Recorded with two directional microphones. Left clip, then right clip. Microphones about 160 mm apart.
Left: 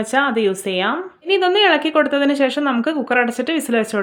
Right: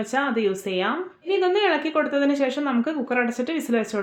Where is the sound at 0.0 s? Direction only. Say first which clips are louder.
Left 6 dB; 30° left (ahead or behind).